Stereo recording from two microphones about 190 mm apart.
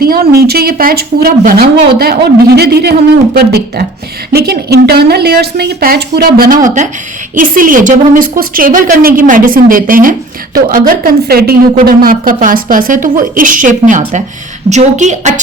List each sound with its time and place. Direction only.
0.0 s a woman's voice: 50° right (ahead or behind)